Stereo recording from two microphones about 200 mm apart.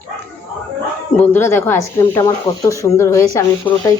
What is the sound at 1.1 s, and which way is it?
Speech, 10° left (ahead or behind).